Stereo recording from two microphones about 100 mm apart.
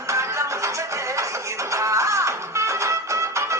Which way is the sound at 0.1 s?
30° right (ahead or behind).